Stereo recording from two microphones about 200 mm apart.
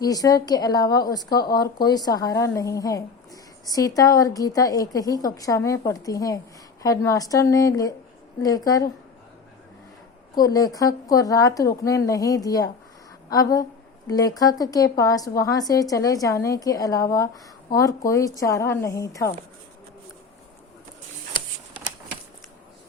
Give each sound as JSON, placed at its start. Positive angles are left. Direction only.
{"t": 0.0, "sound": "a woman's voice", "side_deg": 20}
{"t": 1.3, "sound": "speech", "side_deg": 50}
{"t": 1.5, "sound": "a woman's voice", "side_deg": 20}
{"t": 10.3, "sound": "a woman's voice", "side_deg": 20}